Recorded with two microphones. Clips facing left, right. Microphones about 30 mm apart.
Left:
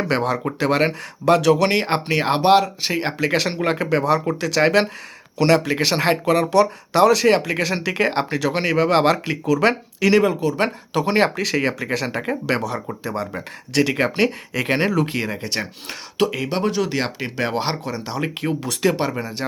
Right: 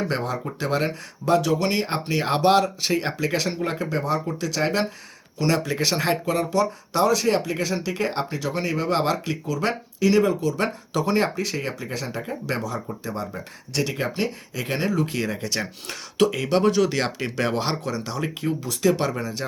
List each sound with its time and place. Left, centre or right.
0.1 s speech: left
2.2 s speech: left
3.3 s speech: left
5.4 s speech: left
6.2 s speech: left
8.4 s speech: left
11.2 s speech: left
12.2 s speech: left
15.1 s speech: left
18.3 s speech: left
19.2 s speech: left